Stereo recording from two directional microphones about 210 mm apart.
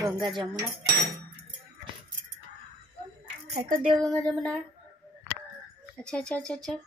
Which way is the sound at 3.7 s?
Centre (ahead or behind).